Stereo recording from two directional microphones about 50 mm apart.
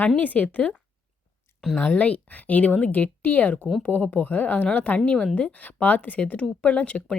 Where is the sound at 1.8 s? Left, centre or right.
Left.